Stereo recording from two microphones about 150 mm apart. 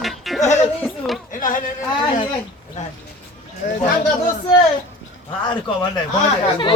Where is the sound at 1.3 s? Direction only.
65° left (ahead or behind).